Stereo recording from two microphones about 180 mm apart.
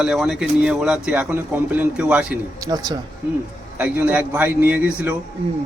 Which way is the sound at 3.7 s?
10° right (ahead or behind).